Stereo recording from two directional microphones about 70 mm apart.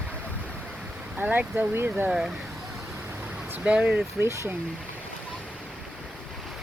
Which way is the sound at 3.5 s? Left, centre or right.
Centre.